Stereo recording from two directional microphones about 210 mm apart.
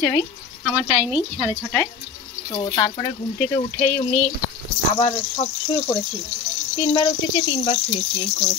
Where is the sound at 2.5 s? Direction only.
20° left (ahead or behind).